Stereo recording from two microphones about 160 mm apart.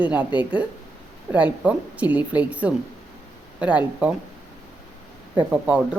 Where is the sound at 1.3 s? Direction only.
10° right (ahead or behind).